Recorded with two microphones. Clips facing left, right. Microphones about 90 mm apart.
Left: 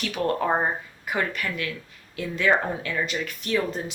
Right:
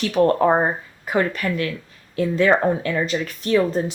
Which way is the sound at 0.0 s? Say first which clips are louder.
Right 8 dB; 35° right (ahead or behind).